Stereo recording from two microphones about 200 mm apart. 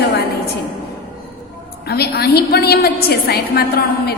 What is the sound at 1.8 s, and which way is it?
A woman's voice, 50° left (ahead or behind).